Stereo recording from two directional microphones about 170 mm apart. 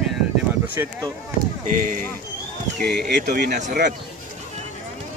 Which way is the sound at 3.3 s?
70° right (ahead or behind).